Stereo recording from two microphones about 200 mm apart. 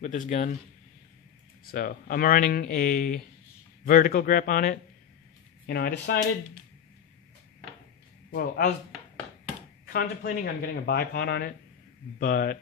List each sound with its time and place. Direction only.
0.0 s a man's voice: 35° left (ahead or behind)
1.7 s speech: 45° left (ahead or behind)
8.3 s speech: 45° left (ahead or behind)
9.9 s speech: 50° left (ahead or behind)
12.2 s speech: 45° left (ahead or behind)